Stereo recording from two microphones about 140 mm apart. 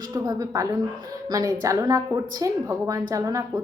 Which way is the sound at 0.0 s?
25° right (ahead or behind).